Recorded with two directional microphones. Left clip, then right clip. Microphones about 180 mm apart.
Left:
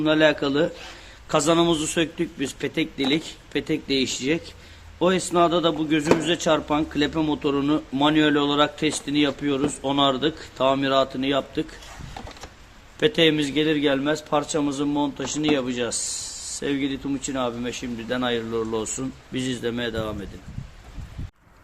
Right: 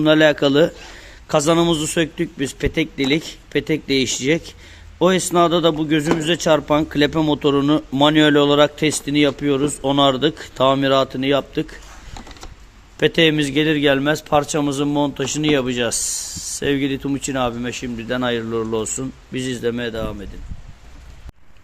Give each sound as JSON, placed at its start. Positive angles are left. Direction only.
{"t": 0.0, "sound": "a man's voice", "side_deg": -40}
{"t": 13.0, "sound": "a man's voice", "side_deg": -35}